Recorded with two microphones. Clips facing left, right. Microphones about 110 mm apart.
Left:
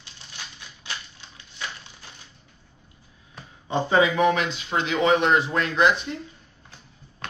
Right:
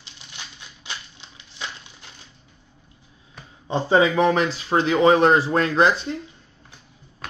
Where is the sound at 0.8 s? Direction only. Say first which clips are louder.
Even; 20° right (ahead or behind).